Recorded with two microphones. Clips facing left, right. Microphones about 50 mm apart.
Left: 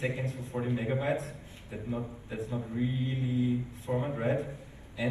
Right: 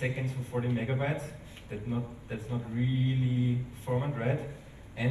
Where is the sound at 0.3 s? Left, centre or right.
Right.